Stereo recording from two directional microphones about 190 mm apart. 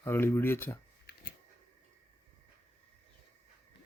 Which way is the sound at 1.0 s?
55° left (ahead or behind).